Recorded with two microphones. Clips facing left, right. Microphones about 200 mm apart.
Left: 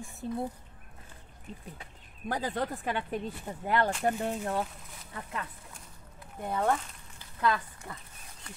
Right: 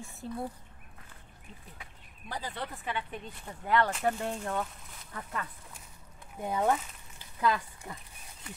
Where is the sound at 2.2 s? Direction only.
50° left (ahead or behind).